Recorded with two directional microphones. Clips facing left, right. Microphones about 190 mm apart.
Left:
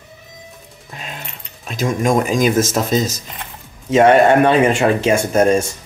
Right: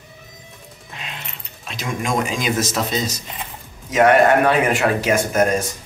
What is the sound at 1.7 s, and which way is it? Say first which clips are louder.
Speech: left 7 dB; 45° left (ahead or behind).